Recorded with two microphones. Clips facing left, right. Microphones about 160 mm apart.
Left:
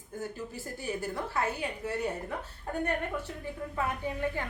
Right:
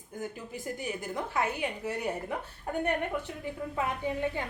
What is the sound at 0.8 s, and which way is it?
A woman's voice, 15° right (ahead or behind).